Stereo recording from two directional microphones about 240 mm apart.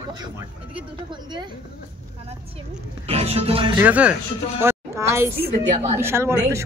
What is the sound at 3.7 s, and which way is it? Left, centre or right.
A woman's voice, centre.